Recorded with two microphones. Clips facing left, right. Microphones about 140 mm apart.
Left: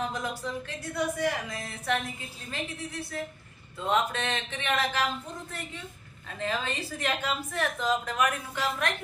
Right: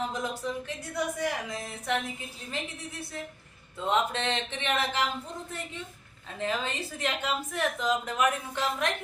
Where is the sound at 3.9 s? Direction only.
25° right (ahead or behind).